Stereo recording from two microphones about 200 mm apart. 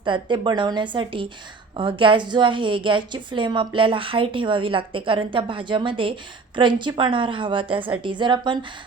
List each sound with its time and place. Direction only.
0.0 s a woman's voice: 25° right (ahead or behind)